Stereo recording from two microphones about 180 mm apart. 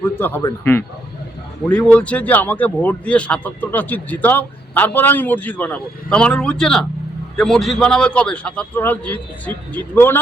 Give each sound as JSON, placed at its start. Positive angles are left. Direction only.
{"t": 0.0, "sound": "a man's voice", "side_deg": 10}